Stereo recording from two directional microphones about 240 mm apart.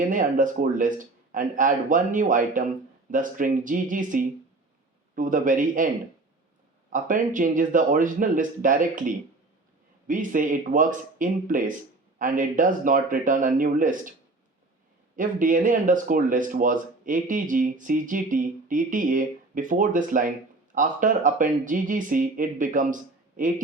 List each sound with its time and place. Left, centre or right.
0.1 s speech: right
6.9 s speech: right
15.1 s speech: right